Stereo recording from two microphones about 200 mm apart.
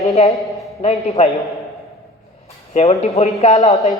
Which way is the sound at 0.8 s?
30° left (ahead or behind).